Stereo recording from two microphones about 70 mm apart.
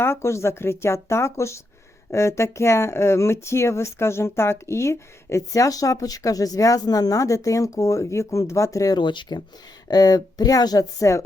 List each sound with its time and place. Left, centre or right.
0.0 s speech: left
5.5 s speech: left
9.9 s speech: left